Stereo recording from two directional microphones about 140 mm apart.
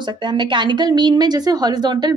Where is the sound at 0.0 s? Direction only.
35° right (ahead or behind).